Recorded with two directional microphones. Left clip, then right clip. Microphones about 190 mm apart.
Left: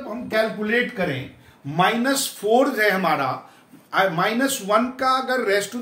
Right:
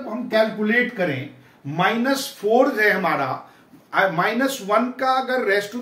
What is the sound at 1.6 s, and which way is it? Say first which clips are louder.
A man's voice: left 1 dB; 25° left (ahead or behind).